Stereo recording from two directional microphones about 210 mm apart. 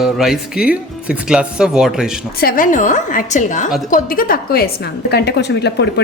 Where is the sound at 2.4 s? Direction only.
40° left (ahead or behind).